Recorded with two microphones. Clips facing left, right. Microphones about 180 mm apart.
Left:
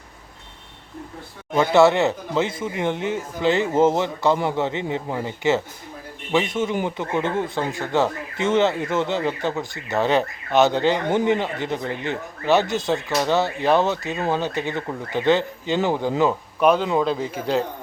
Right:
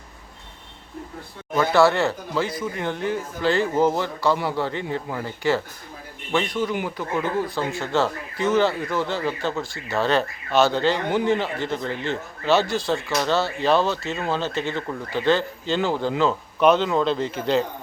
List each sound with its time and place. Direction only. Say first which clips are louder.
1.5 s speech: left 2 dB; 20° left (ahead or behind); by 17.7 s 5° left (ahead or behind)